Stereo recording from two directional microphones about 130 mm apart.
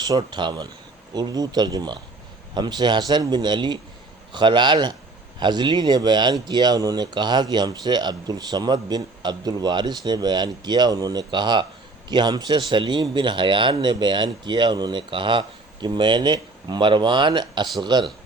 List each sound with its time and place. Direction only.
0.0 s speech: 35° right (ahead or behind)